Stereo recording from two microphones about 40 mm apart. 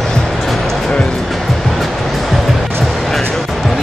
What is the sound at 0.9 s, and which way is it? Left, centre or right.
Music, left.